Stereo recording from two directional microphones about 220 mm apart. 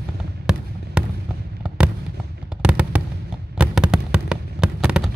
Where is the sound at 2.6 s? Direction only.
5° right (ahead or behind).